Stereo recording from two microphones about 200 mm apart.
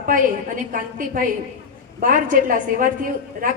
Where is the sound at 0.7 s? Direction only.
45° right (ahead or behind).